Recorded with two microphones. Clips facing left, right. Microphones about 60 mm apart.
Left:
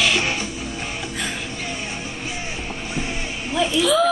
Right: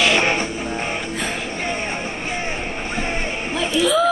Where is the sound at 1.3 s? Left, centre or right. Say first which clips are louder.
Right 4 dB; right.